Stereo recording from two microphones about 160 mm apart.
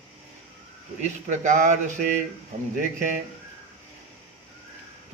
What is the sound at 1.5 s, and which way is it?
Speech, 55° right (ahead or behind).